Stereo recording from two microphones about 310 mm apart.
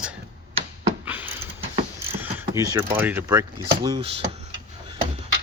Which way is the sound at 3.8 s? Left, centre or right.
Centre.